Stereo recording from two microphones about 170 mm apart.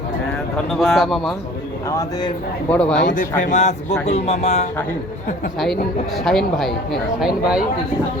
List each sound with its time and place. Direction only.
0.5 s speech: centre (ahead or behind)
1.9 s speech: 20° left (ahead or behind)
2.6 s speech: 5° left (ahead or behind)
3.4 s speech: 45° left (ahead or behind)
6.2 s speech: centre (ahead or behind)